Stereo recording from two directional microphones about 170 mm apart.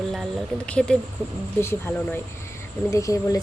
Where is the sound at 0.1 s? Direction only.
5° left (ahead or behind).